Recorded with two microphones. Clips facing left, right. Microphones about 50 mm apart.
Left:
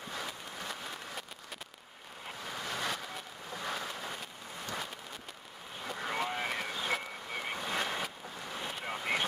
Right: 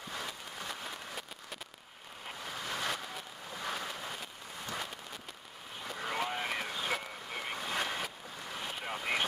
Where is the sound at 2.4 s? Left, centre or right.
Centre.